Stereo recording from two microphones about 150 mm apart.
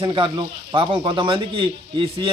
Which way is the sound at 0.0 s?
35° right (ahead or behind).